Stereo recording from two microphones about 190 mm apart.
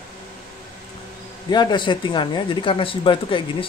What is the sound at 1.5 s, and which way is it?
Speech, 25° left (ahead or behind).